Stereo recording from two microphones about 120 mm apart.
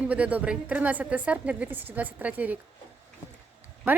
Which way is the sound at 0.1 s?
10° right (ahead or behind).